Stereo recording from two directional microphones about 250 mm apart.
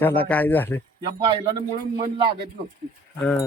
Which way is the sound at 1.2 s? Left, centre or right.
Right.